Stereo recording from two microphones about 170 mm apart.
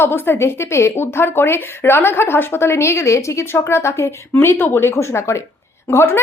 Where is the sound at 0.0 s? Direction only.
15° left (ahead or behind).